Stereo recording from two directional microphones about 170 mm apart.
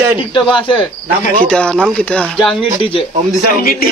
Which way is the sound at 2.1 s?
Centre (ahead or behind).